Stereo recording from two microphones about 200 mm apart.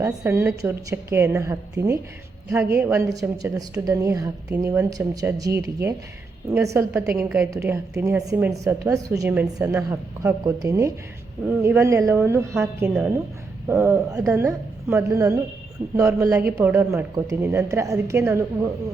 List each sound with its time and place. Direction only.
0.0 s a woman's voice: 15° right (ahead or behind)
6.5 s a woman's voice: 15° right (ahead or behind)